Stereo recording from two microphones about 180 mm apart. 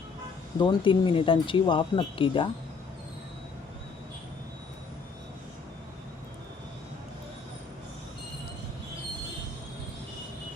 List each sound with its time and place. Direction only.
0.6 s speech: 25° left (ahead or behind)